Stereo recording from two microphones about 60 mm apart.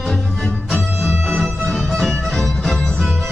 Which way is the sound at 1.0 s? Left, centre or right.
Centre.